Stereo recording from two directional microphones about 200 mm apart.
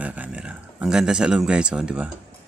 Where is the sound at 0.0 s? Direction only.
5° right (ahead or behind).